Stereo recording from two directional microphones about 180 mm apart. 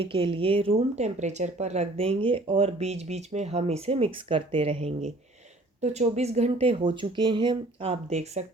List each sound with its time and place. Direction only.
0.0 s speech: 30° right (ahead or behind)